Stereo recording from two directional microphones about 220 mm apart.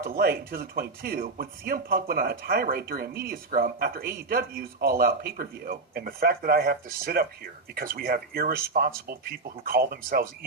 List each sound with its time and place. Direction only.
0.0 s speech: 45° right (ahead or behind)